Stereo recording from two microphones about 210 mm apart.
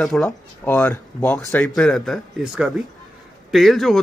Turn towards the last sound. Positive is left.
turn(degrees=0)  # may be behind; listen again after turning